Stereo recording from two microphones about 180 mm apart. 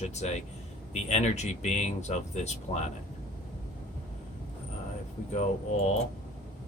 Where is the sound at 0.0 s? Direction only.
35° left (ahead or behind).